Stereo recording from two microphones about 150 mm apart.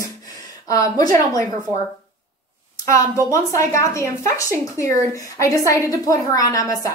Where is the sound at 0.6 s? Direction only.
25° left (ahead or behind).